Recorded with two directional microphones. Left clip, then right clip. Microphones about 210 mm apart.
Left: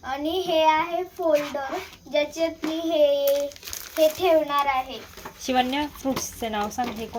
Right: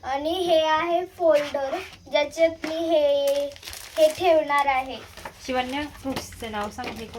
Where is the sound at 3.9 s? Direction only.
10° right (ahead or behind).